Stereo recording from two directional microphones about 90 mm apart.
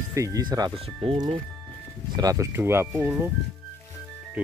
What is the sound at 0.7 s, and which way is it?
Speech, 90° right.